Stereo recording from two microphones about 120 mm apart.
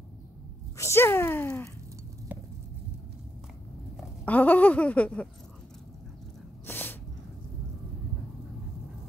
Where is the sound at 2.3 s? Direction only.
15° right (ahead or behind).